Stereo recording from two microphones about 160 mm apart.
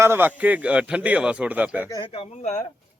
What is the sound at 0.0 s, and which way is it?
A man's voice, 15° right (ahead or behind).